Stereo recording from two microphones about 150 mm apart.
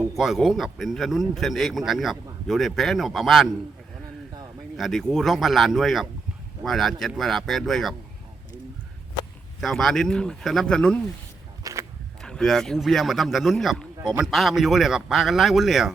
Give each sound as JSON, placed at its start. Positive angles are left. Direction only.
{"t": 0.2, "sound": "speech", "side_deg": 0}
{"t": 4.8, "sound": "speech", "side_deg": 5}
{"t": 9.6, "sound": "speech", "side_deg": 0}
{"t": 11.6, "sound": "a sound", "side_deg": -20}
{"t": 12.2, "sound": "speech", "side_deg": 5}